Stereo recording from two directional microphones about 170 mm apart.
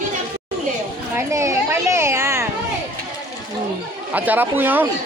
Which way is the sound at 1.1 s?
15° right (ahead or behind).